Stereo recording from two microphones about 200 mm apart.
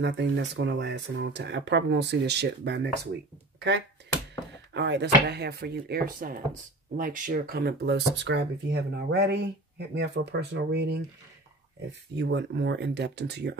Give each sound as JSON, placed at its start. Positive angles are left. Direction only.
{"t": 0.0, "sound": "speech", "side_deg": -60}
{"t": 4.7, "sound": "speech", "side_deg": -60}
{"t": 12.2, "sound": "speech", "side_deg": -60}